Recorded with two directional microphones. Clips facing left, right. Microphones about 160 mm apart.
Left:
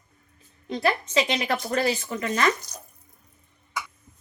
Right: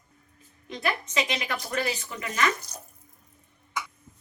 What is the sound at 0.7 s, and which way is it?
A woman's voice, 35° left (ahead or behind).